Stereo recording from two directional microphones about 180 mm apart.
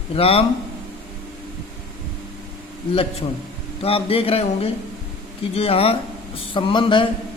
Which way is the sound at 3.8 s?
30° left (ahead or behind).